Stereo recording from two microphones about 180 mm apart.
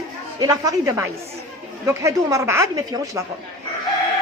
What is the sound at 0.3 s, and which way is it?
A woman's voice, 20° right (ahead or behind).